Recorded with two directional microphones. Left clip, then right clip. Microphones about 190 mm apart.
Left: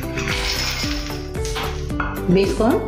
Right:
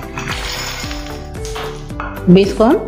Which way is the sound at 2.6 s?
45° right (ahead or behind).